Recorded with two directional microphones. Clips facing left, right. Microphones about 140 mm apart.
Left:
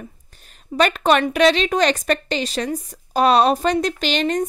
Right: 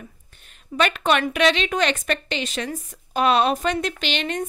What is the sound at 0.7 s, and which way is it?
A woman's voice, 40° left (ahead or behind).